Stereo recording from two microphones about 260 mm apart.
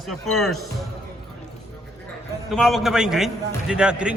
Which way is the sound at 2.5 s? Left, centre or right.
Centre.